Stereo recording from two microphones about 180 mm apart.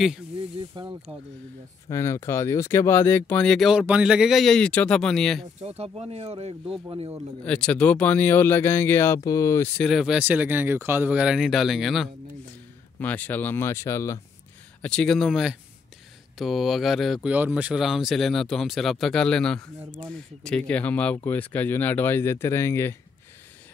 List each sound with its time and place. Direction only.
0.6 s mechanisms: 25° right (ahead or behind)
1.9 s speech: 15° left (ahead or behind)
5.6 s speech: 35° right (ahead or behind)
6.9 s mechanisms: 20° right (ahead or behind)
7.4 s speech: 5° left (ahead or behind)
9.8 s speech: centre (ahead or behind); by 14.2 s 15° left (ahead or behind)
14.8 s speech: 5° left (ahead or behind)